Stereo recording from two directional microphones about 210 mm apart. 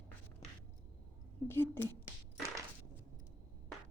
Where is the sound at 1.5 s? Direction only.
10° left (ahead or behind).